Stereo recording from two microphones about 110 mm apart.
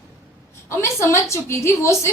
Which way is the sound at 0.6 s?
25° left (ahead or behind).